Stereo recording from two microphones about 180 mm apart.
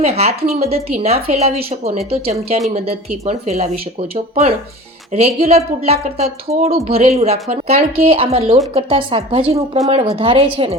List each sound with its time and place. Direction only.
0.0 s speech: 35° right (ahead or behind)